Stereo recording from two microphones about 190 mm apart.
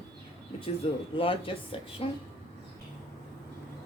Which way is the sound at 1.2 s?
30° left (ahead or behind).